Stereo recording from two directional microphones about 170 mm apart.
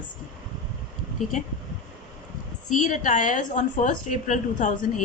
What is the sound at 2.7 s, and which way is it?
A woman's voice, 50° left (ahead or behind).